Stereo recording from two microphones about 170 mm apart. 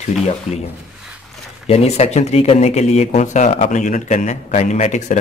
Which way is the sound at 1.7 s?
40° left (ahead or behind).